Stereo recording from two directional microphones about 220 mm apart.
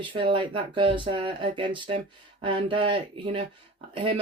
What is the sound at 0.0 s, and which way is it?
Speech, 25° right (ahead or behind).